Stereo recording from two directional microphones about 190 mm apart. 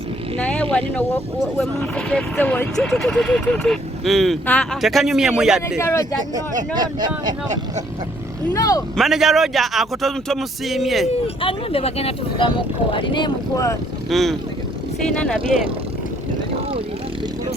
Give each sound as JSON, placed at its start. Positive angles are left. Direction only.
{"t": 0.3, "sound": "speech", "side_deg": 5}
{"t": 5.8, "sound": "speech", "side_deg": 15}
{"t": 6.7, "sound": "speech", "side_deg": -20}
{"t": 8.5, "sound": "speech", "side_deg": 20}
{"t": 9.0, "sound": "speech", "side_deg": 0}
{"t": 11.1, "sound": "speech", "side_deg": 30}
{"t": 14.1, "sound": "speech", "side_deg": 0}
{"t": 15.5, "sound": "speech", "side_deg": 0}